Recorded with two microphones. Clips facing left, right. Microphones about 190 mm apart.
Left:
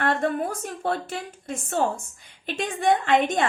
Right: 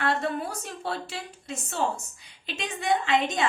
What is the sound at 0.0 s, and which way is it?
A woman's voice, 50° left (ahead or behind).